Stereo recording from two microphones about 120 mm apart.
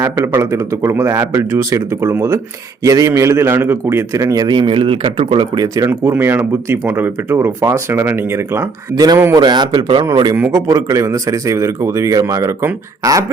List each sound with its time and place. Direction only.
0.0 s speech: 25° right (ahead or behind); by 5.5 s 45° right (ahead or behind)
5.5 s speech: 30° right (ahead or behind)
5.9 s speech: 15° right (ahead or behind)
9.4 s a man's voice: 40° right (ahead or behind)
10.5 s speech: 25° right (ahead or behind)